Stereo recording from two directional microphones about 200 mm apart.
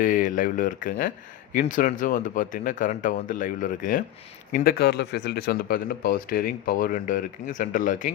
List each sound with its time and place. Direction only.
0.0 s speech: 40° left (ahead or behind)